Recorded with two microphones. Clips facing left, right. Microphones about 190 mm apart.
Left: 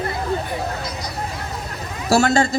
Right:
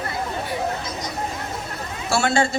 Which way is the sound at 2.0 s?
40° left (ahead or behind).